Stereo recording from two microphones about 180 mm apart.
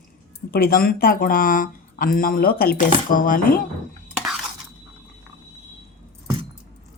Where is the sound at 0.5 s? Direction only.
55° left (ahead or behind).